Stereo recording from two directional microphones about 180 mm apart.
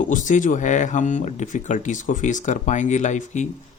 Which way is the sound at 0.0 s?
45° left (ahead or behind).